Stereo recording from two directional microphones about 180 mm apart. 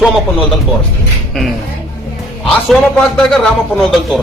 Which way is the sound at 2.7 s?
Centre (ahead or behind).